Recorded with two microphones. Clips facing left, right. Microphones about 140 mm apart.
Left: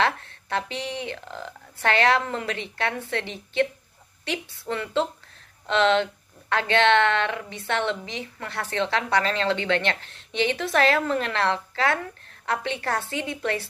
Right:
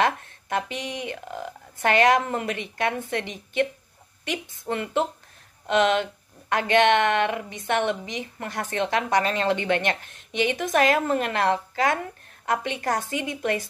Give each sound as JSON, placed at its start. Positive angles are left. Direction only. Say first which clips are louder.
{"t": 0.0, "sound": "speech", "louder": "right 1 dB", "side_deg": -15}
{"t": 1.2, "sound": "speech", "louder": "right 3 dB", "side_deg": -55}
{"t": 1.8, "sound": "a woman's voice", "louder": "right 2 dB", "side_deg": -15}